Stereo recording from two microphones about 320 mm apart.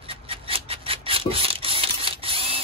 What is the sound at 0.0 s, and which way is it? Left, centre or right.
Rub, centre.